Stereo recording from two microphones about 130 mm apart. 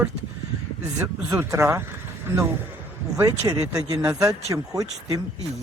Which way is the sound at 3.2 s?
25° right (ahead or behind).